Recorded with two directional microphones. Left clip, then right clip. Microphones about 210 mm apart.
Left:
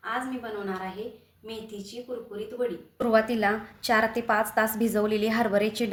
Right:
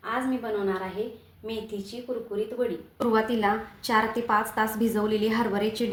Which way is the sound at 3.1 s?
55° left (ahead or behind).